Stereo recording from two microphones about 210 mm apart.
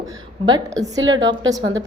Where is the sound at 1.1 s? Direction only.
65° right (ahead or behind).